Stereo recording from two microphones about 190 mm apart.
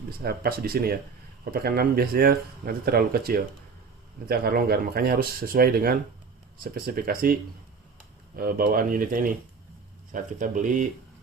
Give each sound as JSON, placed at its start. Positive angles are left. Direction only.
{"t": 0.2, "sound": "speech", "side_deg": -55}
{"t": 8.4, "sound": "speech", "side_deg": -50}